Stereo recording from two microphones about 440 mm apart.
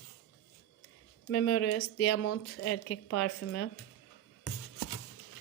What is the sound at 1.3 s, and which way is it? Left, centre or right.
Speech, left.